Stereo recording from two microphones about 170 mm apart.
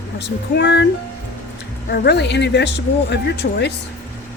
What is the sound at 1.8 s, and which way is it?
A woman's voice, 75° left (ahead or behind).